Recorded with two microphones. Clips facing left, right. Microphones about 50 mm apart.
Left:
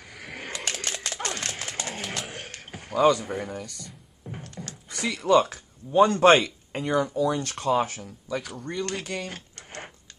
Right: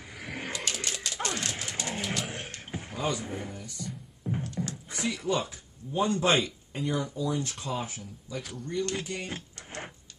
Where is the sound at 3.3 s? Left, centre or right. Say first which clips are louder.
Left 6 dB; left.